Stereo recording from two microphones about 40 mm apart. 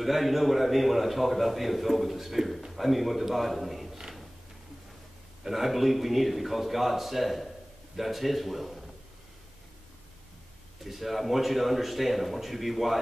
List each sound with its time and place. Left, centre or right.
0.0 s a man's voice: centre
5.4 s a man's voice: centre
10.8 s a man's voice: centre